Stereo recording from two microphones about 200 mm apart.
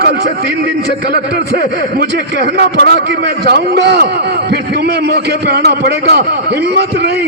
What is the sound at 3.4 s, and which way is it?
A man's voice, 55° right (ahead or behind).